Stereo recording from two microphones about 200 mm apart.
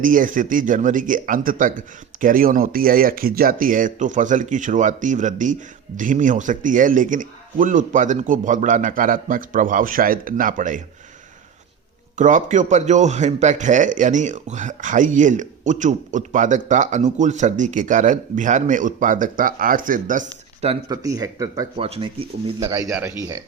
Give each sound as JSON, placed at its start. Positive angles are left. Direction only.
{"t": 0.0, "sound": "speech", "side_deg": -40}
{"t": 12.1, "sound": "speech", "side_deg": -40}
{"t": 20.9, "sound": "speech", "side_deg": -15}
{"t": 21.8, "sound": "speech", "side_deg": -30}
{"t": 22.6, "sound": "speech", "side_deg": -15}